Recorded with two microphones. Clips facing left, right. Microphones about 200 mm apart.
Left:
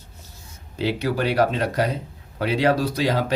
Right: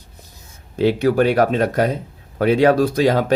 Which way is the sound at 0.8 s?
50° right (ahead or behind).